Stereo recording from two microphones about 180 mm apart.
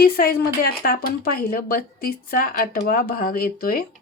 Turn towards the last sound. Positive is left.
turn(degrees=55)  # may be behind; listen again after turning